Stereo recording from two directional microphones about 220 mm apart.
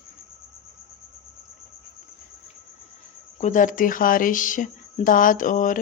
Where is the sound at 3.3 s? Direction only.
35° left (ahead or behind).